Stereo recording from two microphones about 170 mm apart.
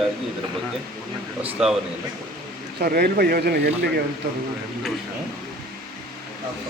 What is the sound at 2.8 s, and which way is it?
Speech, 65° right (ahead or behind).